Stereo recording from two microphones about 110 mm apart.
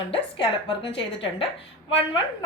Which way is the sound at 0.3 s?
55° left (ahead or behind).